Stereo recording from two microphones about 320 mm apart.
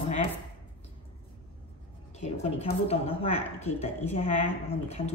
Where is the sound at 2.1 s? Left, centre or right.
Centre.